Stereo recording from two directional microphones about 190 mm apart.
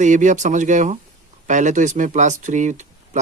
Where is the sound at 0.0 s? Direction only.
40° right (ahead or behind).